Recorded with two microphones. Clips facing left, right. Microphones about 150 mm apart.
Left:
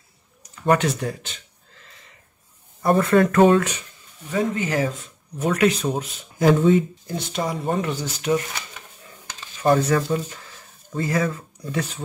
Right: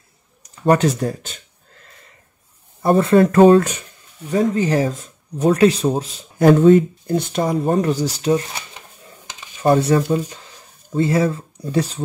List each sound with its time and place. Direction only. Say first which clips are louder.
0.7 s speech: right 4 dB; 40° right (ahead or behind)
2.8 s speech: right 4 dB; 30° right (ahead or behind)
6.3 s speech: right 6 dB; 55° right (ahead or behind); by 8.8 s 25° right (ahead or behind)
9.3 s a sound: right 3 dB; 20° right (ahead or behind)
9.8 s speech: right 4 dB; 30° right (ahead or behind)